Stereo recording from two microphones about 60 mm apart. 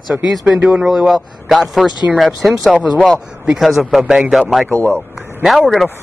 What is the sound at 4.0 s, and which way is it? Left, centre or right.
Speech, centre.